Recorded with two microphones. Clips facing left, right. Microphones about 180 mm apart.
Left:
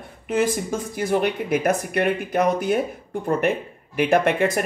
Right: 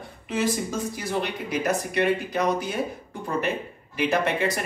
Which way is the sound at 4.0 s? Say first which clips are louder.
Left 5 dB; 55° left (ahead or behind).